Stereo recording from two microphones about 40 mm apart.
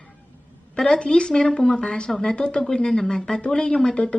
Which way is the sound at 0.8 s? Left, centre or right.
Left.